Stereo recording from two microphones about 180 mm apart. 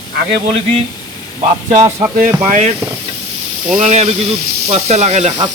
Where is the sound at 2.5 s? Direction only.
40° right (ahead or behind).